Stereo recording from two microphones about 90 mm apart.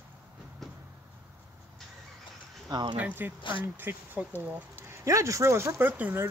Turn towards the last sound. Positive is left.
turn(degrees=-20)  # may be behind; listen again after turning